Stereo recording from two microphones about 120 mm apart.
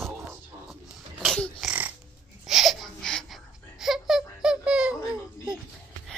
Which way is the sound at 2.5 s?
Centre (ahead or behind).